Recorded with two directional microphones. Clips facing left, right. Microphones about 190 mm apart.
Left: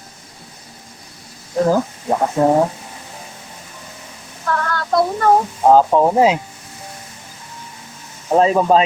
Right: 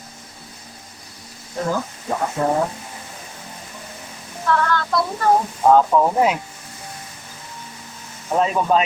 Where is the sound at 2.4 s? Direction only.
45° left (ahead or behind).